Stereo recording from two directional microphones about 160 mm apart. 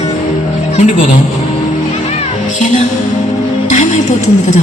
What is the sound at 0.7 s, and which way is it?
Speech, 50° left (ahead or behind).